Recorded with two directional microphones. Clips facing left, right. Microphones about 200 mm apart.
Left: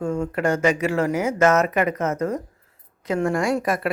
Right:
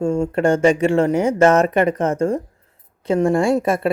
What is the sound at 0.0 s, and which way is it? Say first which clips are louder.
A woman's voice: right 5 dB; 25° right (ahead or behind).